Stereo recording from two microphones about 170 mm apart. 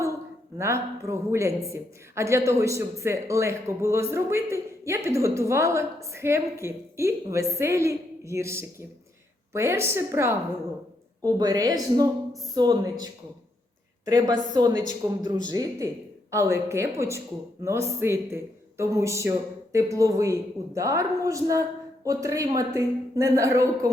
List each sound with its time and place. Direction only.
0.6 s a woman's voice: 15° right (ahead or behind)
14.1 s a woman's voice: 25° right (ahead or behind)